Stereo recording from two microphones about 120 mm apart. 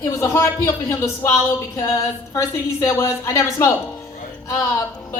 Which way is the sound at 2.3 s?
25° left (ahead or behind).